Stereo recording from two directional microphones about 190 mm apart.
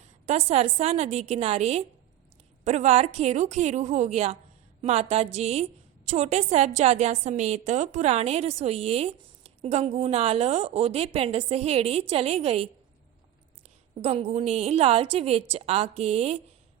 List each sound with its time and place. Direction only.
0.3 s a woman's voice: 35° right (ahead or behind)
14.0 s a woman's voice: 35° right (ahead or behind)